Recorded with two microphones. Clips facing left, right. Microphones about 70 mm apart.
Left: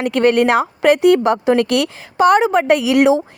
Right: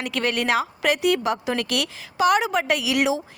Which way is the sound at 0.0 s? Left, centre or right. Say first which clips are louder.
Left 11 dB; left.